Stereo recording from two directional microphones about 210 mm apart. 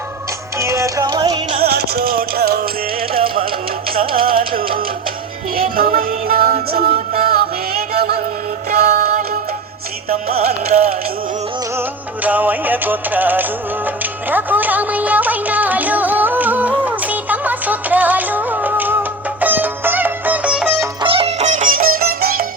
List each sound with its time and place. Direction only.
0.6 s music: 15° right (ahead or behind)
1.6 s music: 50° right (ahead or behind)
10.3 s music: 30° right (ahead or behind)
11.8 s music: 10° right (ahead or behind)
21.0 s music: 25° right (ahead or behind); by 22.4 s 45° right (ahead or behind)